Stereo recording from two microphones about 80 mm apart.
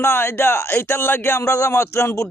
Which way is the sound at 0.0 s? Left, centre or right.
Left.